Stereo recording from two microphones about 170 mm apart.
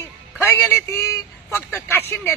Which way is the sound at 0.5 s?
15° left (ahead or behind).